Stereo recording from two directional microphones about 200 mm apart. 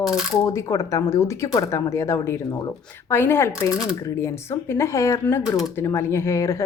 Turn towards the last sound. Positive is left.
turn(degrees=15)  # may be behind; listen again after turning